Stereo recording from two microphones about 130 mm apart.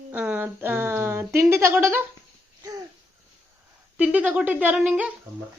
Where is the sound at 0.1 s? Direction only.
10° right (ahead or behind).